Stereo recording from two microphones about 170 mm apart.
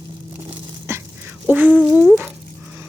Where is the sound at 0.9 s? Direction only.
15° right (ahead or behind).